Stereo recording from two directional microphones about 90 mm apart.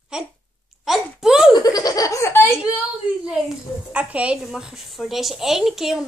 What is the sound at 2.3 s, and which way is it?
Speech, 25° left (ahead or behind).